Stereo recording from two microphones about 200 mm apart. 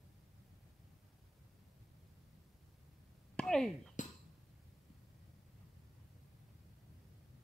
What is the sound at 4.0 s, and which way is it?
Chink, 40° left (ahead or behind).